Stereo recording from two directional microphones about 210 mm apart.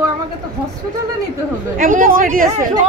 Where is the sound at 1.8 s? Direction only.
40° right (ahead or behind).